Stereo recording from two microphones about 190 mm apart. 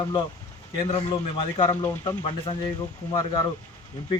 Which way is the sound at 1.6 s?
15° left (ahead or behind).